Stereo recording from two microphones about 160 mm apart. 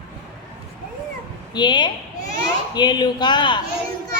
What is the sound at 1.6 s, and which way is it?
Speech, 30° left (ahead or behind).